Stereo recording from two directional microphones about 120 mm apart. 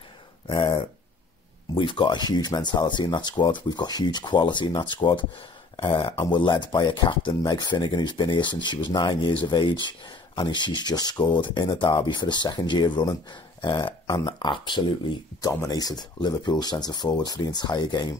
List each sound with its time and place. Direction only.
0.5 s speech: 40° left (ahead or behind)
1.8 s speech: 40° left (ahead or behind)
15.4 s speech: 30° left (ahead or behind)